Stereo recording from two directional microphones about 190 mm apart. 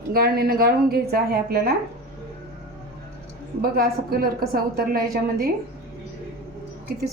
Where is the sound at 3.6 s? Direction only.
50° right (ahead or behind).